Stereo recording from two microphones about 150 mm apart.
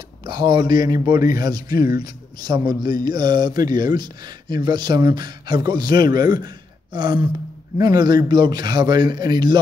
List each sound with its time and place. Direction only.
0.2 s speech: 30° right (ahead or behind)